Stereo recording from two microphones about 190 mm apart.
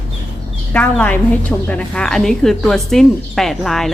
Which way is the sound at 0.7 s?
10° left (ahead or behind).